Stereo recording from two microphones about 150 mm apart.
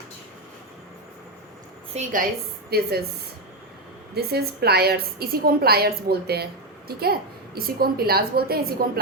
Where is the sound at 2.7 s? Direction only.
90° right.